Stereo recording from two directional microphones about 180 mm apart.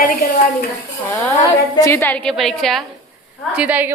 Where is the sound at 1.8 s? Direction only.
10° left (ahead or behind).